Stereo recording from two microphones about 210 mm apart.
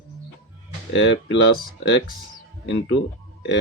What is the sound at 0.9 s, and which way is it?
Speech, 60° left (ahead or behind).